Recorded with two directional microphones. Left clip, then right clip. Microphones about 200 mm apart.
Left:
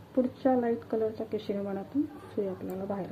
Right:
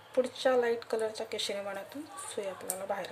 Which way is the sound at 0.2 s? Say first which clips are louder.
Even; 15° right (ahead or behind).